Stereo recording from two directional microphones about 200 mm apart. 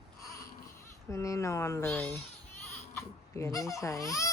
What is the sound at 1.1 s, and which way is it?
Speech, 15° left (ahead or behind).